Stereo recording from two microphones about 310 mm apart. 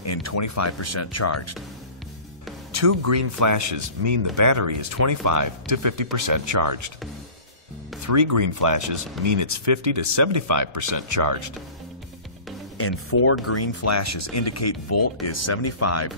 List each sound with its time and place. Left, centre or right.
0.0 s speech: left
2.7 s speech: right
6.1 s speech: right
8.1 s speech: right
12.7 s speech: left